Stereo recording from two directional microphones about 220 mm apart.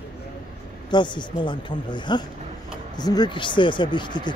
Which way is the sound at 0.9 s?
20° left (ahead or behind).